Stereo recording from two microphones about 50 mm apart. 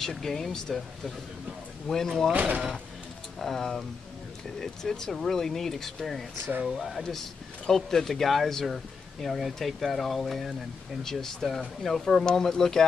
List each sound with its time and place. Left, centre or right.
0.0 s speech: centre
2.3 s speech: right
3.3 s speech: centre
6.3 s speech: right
6.7 s speech: centre
7.0 s speech: centre